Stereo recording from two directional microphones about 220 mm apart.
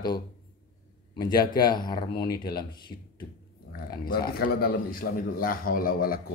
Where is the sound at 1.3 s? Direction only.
20° left (ahead or behind).